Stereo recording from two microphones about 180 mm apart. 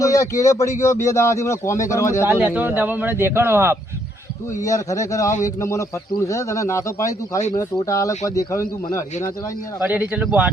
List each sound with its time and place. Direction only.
0.0 s speech: 15° left (ahead or behind)
2.2 s a man's voice: 5° right (ahead or behind)
4.6 s a man's voice: 15° left (ahead or behind)
9.8 s a man's voice: 10° right (ahead or behind)